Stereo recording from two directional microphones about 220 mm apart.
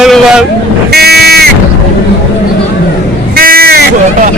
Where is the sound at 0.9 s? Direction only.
45° right (ahead or behind).